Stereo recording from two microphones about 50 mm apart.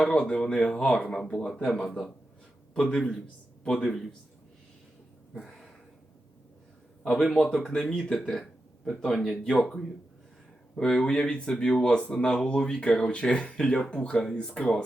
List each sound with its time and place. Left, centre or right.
0.0 s a man's voice: centre
5.4 s a sound: centre
7.3 s speech: centre